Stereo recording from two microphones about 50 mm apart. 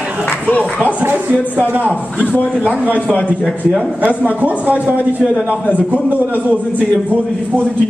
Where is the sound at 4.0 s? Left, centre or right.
Right.